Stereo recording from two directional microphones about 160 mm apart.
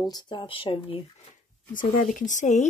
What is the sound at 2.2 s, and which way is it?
Speech, 50° left (ahead or behind).